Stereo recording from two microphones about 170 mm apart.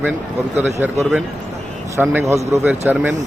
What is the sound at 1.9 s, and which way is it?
A man's voice, 15° right (ahead or behind).